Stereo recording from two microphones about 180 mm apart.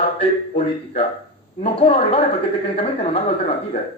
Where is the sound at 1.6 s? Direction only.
35° left (ahead or behind).